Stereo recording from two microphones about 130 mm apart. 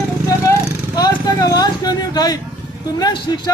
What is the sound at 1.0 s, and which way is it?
Speech, 30° left (ahead or behind).